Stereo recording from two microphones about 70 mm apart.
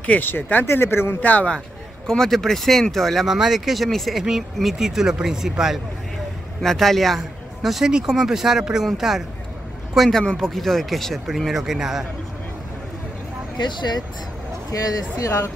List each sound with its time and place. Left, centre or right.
0.0 s speech: left
2.0 s speech: centre
13.6 s speech: left
14.7 s speech: left